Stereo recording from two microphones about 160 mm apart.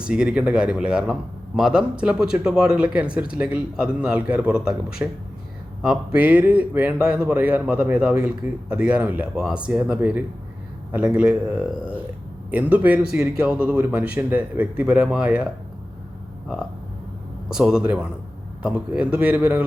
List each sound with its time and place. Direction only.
0.0 s a man's voice: 5° right (ahead or behind)
6.1 s a man's voice: 10° right (ahead or behind)
17.5 s a man's voice: 5° right (ahead or behind)